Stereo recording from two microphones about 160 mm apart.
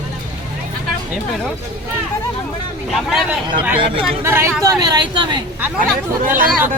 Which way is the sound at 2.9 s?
Centre (ahead or behind).